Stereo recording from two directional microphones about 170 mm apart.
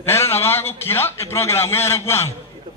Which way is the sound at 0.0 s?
15° left (ahead or behind).